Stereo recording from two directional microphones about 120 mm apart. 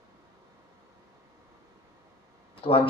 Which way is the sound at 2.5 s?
50° left (ahead or behind).